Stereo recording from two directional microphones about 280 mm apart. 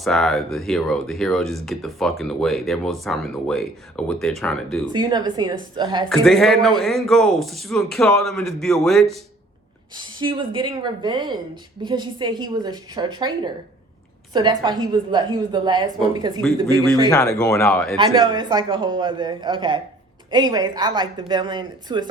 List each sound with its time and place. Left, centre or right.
0.0 s speech: centre
4.9 s a woman's voice: centre
6.1 s speech: centre
9.9 s a woman's voice: centre
17.1 s speech: centre
17.9 s a woman's voice: centre